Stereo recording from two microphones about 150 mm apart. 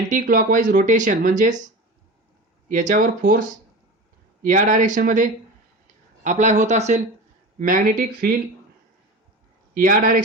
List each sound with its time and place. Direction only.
0.1 s speech: 65° right (ahead or behind)
2.6 s speech: 60° right (ahead or behind)
4.4 s speech: 60° right (ahead or behind)
7.6 s speech: 70° right (ahead or behind)
9.7 s speech: 70° right (ahead or behind)